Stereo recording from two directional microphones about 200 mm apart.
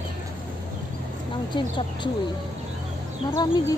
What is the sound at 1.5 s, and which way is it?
Speech, 25° left (ahead or behind).